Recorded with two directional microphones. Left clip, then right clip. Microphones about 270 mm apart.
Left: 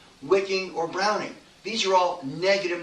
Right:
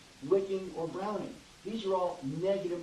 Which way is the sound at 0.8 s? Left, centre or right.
Left.